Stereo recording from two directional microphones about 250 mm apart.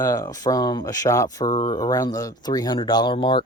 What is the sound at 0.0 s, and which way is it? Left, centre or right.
Speech, centre.